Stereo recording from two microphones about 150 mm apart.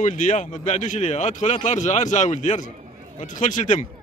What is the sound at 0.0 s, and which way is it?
A man's voice, 55° left (ahead or behind).